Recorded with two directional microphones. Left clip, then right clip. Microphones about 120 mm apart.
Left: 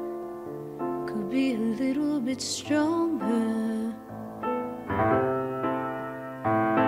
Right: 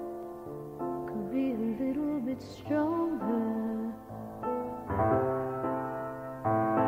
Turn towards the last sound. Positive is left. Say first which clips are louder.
# left 4 dB
turn(degrees=20)  # may be behind; listen again after turning